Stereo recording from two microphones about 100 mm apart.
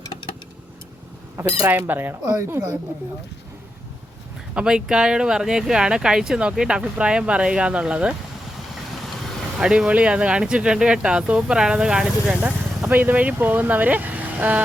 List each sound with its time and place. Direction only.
1.6 s speech: 20° right (ahead or behind)
2.2 s speech: 30° right (ahead or behind)
4.5 s speech: 5° right (ahead or behind)
9.6 s speech: 10° right (ahead or behind)
12.4 s speech: 20° right (ahead or behind)